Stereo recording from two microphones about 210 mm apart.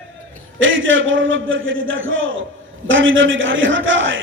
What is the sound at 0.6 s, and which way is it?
A man's voice, 65° right (ahead or behind).